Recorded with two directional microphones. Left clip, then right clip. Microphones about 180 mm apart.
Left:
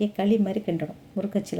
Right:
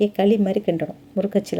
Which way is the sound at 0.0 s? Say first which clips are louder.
Right 6 dB; 30° right (ahead or behind).